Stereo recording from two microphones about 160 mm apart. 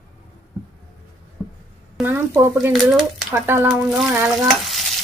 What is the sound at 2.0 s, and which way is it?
Speech, 10° right (ahead or behind).